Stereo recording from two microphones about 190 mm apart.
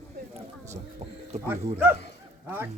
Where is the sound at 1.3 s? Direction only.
35° right (ahead or behind).